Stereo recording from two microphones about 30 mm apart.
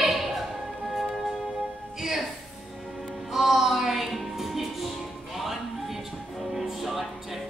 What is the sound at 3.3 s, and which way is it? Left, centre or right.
Music, centre.